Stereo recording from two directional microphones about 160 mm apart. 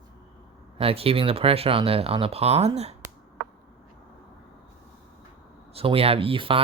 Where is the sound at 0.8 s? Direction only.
35° right (ahead or behind).